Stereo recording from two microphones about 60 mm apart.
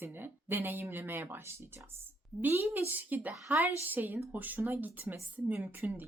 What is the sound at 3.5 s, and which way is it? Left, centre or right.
Speech, right.